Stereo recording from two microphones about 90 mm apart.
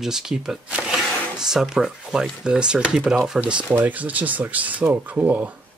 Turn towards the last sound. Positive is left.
turn(degrees=-20)  # may be behind; listen again after turning